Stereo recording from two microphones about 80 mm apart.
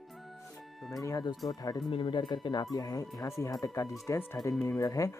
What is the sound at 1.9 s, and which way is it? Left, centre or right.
Speech, left.